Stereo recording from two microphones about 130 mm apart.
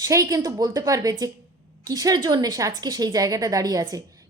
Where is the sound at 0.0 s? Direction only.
25° right (ahead or behind).